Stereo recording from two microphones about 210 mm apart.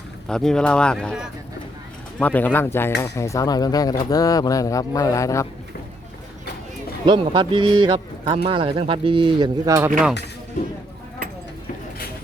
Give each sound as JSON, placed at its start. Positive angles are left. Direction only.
{"t": 0.3, "sound": "a man's voice", "side_deg": 5}
{"t": 7.0, "sound": "speech", "side_deg": -25}